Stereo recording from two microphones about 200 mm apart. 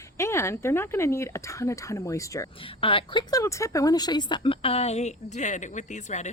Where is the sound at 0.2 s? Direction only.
15° left (ahead or behind).